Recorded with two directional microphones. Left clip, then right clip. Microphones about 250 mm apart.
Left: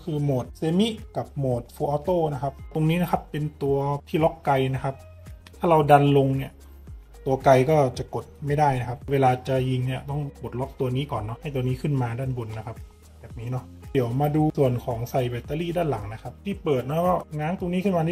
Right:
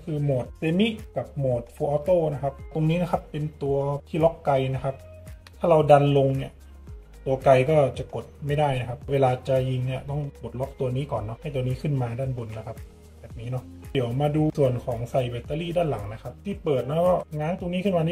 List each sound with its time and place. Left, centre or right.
0.6 s speech: left
13.5 s speech: left